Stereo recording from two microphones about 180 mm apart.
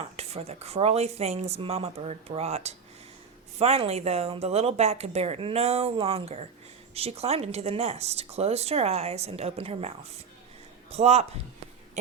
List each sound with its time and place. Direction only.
0.2 s speech: 35° right (ahead or behind)